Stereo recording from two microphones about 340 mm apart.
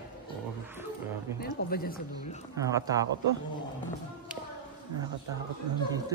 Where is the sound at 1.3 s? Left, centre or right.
Left.